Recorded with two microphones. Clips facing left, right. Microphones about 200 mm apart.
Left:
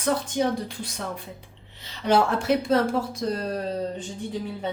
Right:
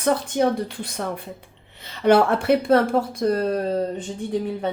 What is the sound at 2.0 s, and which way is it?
Speech, 60° right (ahead or behind).